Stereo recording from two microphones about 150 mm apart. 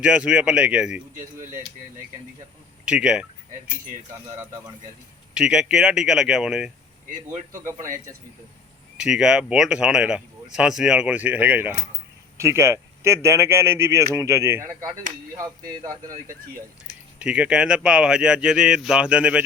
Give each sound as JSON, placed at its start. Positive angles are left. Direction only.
{"t": 0.0, "sound": "speech", "side_deg": -5}
{"t": 2.8, "sound": "speech", "side_deg": -5}
{"t": 5.3, "sound": "speech", "side_deg": -5}
{"t": 7.3, "sound": "speech", "side_deg": -20}
{"t": 9.0, "sound": "speech", "side_deg": -5}
{"t": 17.2, "sound": "speech", "side_deg": -5}